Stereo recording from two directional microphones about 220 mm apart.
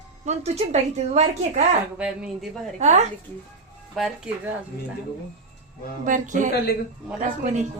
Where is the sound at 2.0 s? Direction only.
5° right (ahead or behind).